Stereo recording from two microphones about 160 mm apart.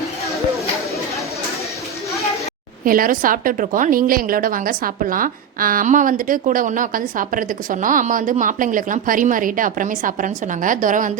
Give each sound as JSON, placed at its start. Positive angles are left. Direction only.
{"t": 2.8, "sound": "a woman's voice", "side_deg": -60}